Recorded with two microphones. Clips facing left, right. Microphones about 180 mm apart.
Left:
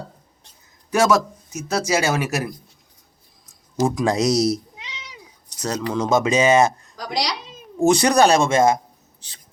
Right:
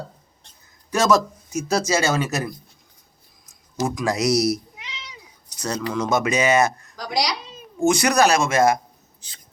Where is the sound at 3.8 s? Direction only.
30° left (ahead or behind).